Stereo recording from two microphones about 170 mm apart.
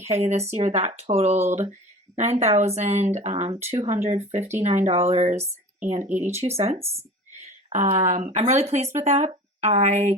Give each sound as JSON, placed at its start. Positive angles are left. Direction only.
{"t": 0.2, "sound": "speech", "side_deg": -40}